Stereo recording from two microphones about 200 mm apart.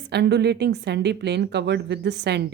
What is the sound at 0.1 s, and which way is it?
Speech, 55° right (ahead or behind).